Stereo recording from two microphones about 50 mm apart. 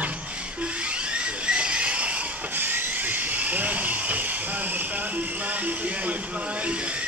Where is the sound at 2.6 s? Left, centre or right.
Right.